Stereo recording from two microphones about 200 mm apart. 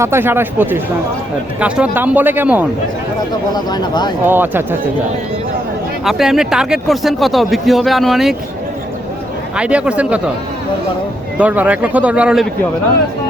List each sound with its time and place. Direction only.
0.0 s speech: 10° right (ahead or behind)
3.5 s speech: 20° left (ahead or behind)
4.3 s speech: 10° right (ahead or behind)
6.1 s speech: centre (ahead or behind)
9.6 s speech: 5° right (ahead or behind)
11.3 s speech: 5° right (ahead or behind)